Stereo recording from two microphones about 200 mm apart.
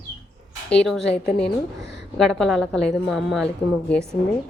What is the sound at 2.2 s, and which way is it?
A woman's voice, centre (ahead or behind).